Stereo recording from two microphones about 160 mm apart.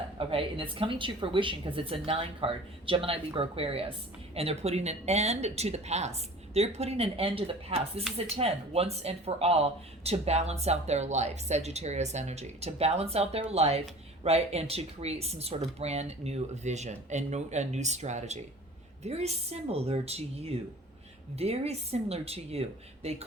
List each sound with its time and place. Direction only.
0.2 s speech: 35° right (ahead or behind)